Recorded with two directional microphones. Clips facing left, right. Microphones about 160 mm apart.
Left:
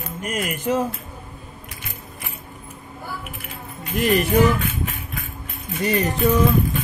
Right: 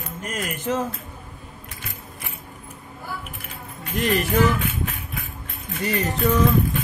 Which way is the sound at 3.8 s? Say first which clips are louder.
Left 3 dB; 10° left (ahead or behind).